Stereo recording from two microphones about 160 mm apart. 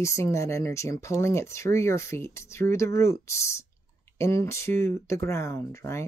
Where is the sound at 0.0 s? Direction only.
15° left (ahead or behind).